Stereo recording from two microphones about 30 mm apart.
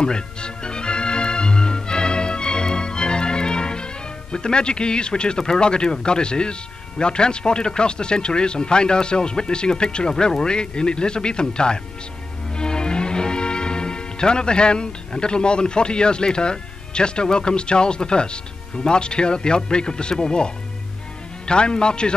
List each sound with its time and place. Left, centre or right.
0.0 s music: left
5.4 s speech: left